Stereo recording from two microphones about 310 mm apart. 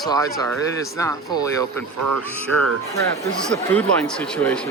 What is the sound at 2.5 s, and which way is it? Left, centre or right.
Speech, right.